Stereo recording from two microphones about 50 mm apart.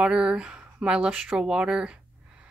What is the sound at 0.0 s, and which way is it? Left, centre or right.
Speech, centre.